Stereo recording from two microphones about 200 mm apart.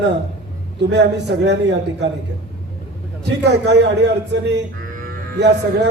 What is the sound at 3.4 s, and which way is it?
Speech, 55° right (ahead or behind).